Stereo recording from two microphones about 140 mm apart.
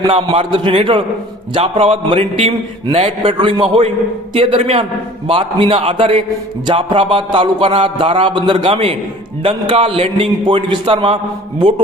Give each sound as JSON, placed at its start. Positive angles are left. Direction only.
{"t": 0.1, "sound": "a man's voice", "side_deg": -40}